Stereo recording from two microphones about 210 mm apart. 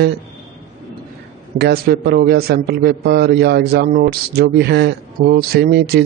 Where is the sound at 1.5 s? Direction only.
50° right (ahead or behind).